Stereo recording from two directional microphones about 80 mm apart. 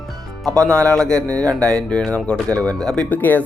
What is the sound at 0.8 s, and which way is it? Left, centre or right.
Speech, centre.